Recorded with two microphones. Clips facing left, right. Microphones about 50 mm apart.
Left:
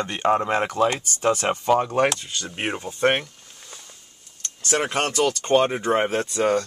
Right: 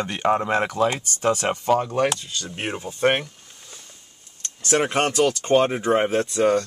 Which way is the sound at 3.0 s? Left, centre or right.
Centre.